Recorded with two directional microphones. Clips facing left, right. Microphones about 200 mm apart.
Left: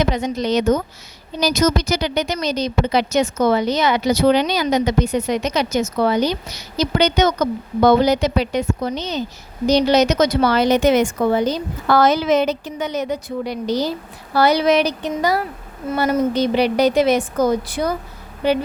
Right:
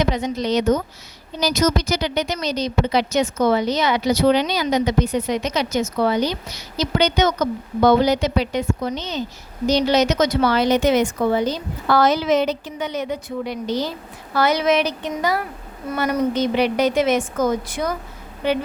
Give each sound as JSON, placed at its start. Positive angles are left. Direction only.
{"t": 0.1, "sound": "a woman's voice", "side_deg": 50}
{"t": 15.9, "sound": "a woman's voice", "side_deg": 25}